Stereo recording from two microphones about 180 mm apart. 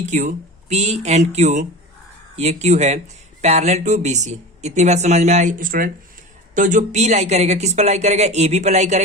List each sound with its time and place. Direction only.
0.0 s speech: 45° right (ahead or behind)